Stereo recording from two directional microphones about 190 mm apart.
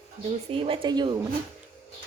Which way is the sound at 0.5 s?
30° right (ahead or behind).